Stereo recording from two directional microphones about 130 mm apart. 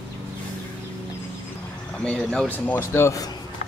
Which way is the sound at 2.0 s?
5° left (ahead or behind).